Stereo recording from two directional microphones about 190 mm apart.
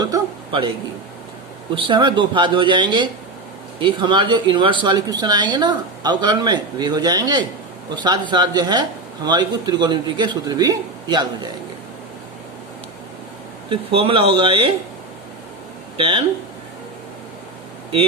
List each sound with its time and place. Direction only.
0.0 s a sound: 20° right (ahead or behind)
1.7 s speech: 25° right (ahead or behind)
13.7 s speech: 30° right (ahead or behind)
16.0 s speech: 25° right (ahead or behind)